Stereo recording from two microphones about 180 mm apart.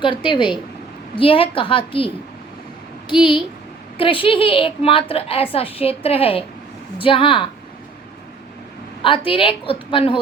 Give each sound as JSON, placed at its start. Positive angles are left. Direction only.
{"t": 0.0, "sound": "a woman's voice", "side_deg": 25}
{"t": 9.0, "sound": "a woman's voice", "side_deg": 30}